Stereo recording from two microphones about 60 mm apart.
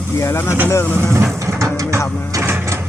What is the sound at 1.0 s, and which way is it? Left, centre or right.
Vehicle, right.